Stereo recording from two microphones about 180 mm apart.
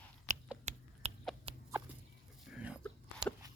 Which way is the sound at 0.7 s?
40° right (ahead or behind).